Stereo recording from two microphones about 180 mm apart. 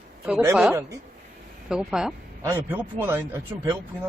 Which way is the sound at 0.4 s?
10° right (ahead or behind).